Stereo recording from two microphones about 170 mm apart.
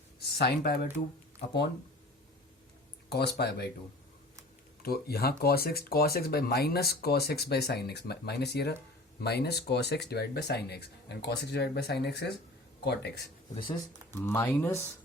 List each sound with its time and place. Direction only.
0.2 s speech: 70° left (ahead or behind)
3.1 s speech: 75° left (ahead or behind)
4.8 s speech: 65° left (ahead or behind)
14.1 s speech: 15° left (ahead or behind)